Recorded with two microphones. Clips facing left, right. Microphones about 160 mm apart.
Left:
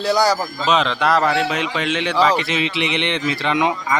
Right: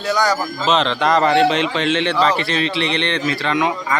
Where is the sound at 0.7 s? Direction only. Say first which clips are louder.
Right 1 dB; 5° left (ahead or behind).